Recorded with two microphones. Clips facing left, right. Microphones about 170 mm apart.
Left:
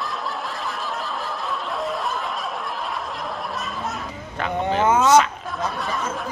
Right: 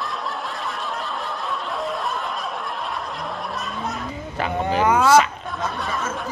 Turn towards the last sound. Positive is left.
turn(degrees=0)  # may be behind; listen again after turning